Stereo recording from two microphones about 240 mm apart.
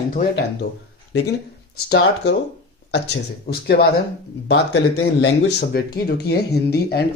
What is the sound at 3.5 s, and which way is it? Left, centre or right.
Speech, left.